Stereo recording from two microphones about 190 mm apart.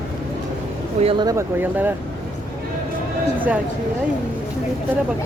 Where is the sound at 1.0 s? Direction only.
25° right (ahead or behind); by 1.9 s 10° right (ahead or behind).